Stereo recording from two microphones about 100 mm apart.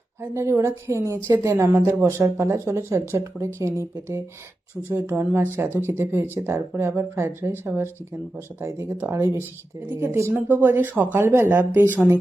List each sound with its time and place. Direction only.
0.2 s a woman's voice: 25° right (ahead or behind)